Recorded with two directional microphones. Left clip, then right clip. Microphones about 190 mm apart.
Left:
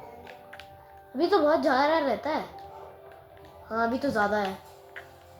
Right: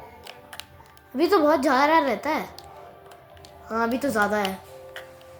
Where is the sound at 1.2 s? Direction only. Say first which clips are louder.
Right 3 dB; 25° right (ahead or behind).